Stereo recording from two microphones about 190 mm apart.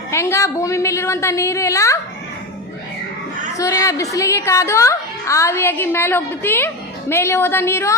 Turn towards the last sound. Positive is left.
turn(degrees=15)  # may be behind; listen again after turning